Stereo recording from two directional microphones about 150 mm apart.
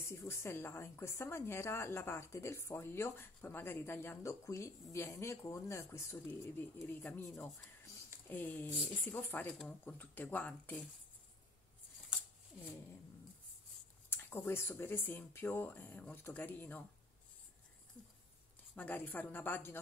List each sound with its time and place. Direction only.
0.0 s a woman's voice: 20° left (ahead or behind)
14.1 s a woman's voice: 15° left (ahead or behind)
18.8 s a woman's voice: 10° left (ahead or behind)